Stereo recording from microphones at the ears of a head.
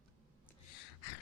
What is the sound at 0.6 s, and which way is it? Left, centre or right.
Gasp, left.